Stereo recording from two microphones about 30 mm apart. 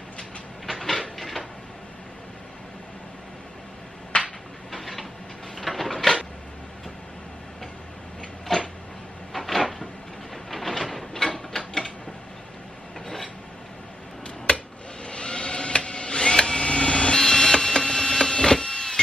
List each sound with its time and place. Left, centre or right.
0.7 s cupboard open or close: centre
1.1 s a sound: centre
4.1 s a sound: left
4.7 s train: centre
5.6 s a sound: centre
8.5 s a sound: centre
9.3 s drawer open or close: centre
10.3 s printer: centre
11.1 s ratchet: centre
13.0 s filing: centre
15.0 s printer: left
17.2 s printer: centre